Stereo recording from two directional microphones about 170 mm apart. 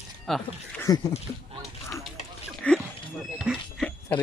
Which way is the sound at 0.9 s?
20° left (ahead or behind).